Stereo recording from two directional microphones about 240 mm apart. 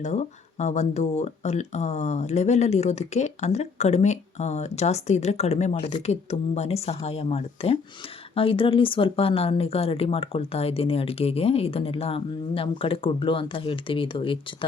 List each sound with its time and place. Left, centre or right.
0.0 s speech: left